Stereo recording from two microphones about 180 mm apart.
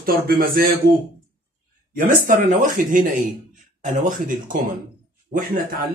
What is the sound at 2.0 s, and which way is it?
Speech, 50° right (ahead or behind).